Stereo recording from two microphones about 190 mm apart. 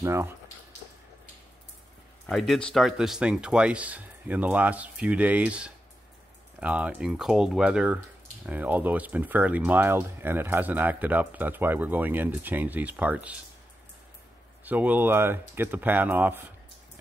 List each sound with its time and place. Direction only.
0.0 s speech: 15° right (ahead or behind)
2.2 s speech: centre (ahead or behind)
14.6 s speech: 10° right (ahead or behind)